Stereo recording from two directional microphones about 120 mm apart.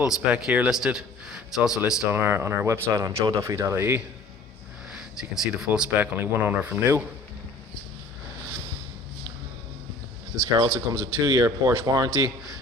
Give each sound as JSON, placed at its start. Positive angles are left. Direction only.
{"t": 0.0, "sound": "speech", "side_deg": -5}
{"t": 2.1, "sound": "speech", "side_deg": -20}
{"t": 4.9, "sound": "speech", "side_deg": -5}
{"t": 10.4, "sound": "speech", "side_deg": -30}